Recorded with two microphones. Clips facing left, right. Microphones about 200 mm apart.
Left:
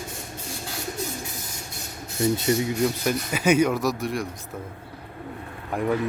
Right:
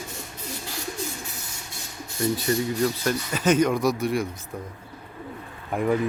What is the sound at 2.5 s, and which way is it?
Speech, 15° left (ahead or behind).